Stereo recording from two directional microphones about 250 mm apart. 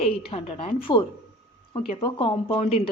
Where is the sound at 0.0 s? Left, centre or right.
Left.